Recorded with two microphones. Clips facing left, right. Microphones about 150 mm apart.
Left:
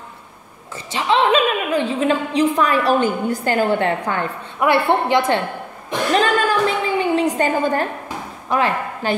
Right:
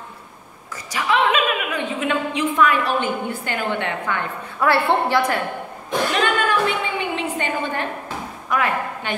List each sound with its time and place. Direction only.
0.9 s a woman's voice: 30° left (ahead or behind)
4.6 s a woman's voice: 20° left (ahead or behind)
6.1 s music: 35° left (ahead or behind)
7.0 s a sound: 40° left (ahead or behind)
8.5 s a woman's voice: 30° left (ahead or behind)